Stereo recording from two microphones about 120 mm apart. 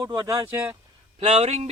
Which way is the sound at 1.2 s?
65° right (ahead or behind).